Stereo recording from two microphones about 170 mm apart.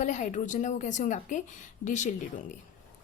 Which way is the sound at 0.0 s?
45° left (ahead or behind).